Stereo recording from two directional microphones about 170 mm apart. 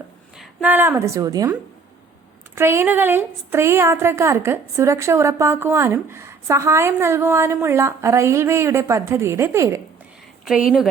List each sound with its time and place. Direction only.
0.3 s a woman's voice: 10° right (ahead or behind)
2.6 s a woman's voice: 15° right (ahead or behind)
10.4 s speech: 5° right (ahead or behind)